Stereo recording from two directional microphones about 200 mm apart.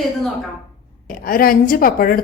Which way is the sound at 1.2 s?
45° left (ahead or behind).